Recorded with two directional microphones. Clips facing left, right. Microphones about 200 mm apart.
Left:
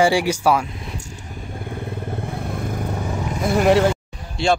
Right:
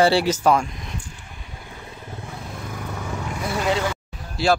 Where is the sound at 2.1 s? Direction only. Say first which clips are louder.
Left 4 dB; 55° left (ahead or behind).